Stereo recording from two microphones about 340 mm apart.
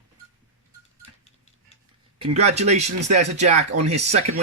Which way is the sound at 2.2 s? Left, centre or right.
Centre.